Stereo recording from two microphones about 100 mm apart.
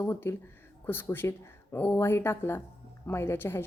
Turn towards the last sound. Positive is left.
turn(degrees=20)  # may be behind; listen again after turning